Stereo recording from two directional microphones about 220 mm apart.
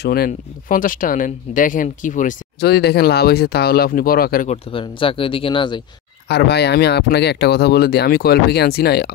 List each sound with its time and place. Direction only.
0.0 s speech: 45° left (ahead or behind)
4.5 s speech: 25° left (ahead or behind)
6.2 s speech: 50° left (ahead or behind)